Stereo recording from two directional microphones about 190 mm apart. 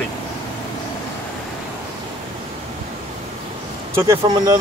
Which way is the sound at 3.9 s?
15° right (ahead or behind).